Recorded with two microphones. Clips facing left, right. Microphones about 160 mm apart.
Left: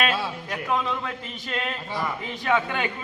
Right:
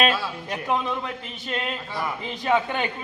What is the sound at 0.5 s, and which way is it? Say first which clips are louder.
A man's voice: right 1 dB; 15° right (ahead or behind).